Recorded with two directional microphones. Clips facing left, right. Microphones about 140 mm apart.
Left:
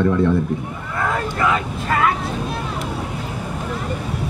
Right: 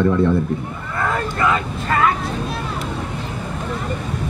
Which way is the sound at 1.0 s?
5° left (ahead or behind).